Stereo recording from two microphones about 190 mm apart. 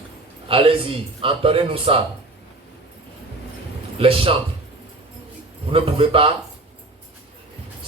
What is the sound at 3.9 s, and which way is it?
Speech, 30° right (ahead or behind).